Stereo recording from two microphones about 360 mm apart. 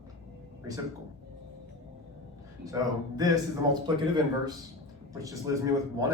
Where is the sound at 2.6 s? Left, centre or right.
Centre.